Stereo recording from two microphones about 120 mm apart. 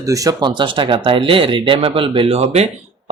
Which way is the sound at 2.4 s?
60° right (ahead or behind).